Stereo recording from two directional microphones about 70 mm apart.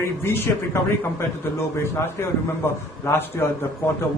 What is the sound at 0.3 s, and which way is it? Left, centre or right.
Speech, left.